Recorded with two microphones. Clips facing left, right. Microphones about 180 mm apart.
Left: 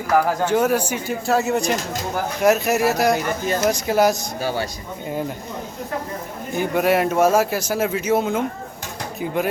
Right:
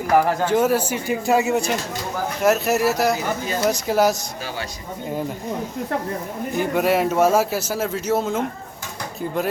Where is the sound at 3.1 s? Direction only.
50° left (ahead or behind).